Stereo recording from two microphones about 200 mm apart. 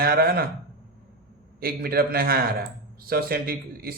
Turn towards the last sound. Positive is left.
turn(degrees=-50)  # may be behind; listen again after turning